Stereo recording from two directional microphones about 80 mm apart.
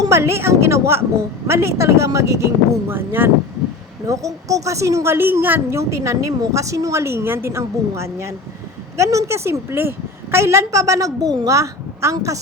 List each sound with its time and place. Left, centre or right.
0.0 s a woman's voice: right
2.9 s speech: right
4.0 s a woman's voice: right
5.1 s a woman's voice: right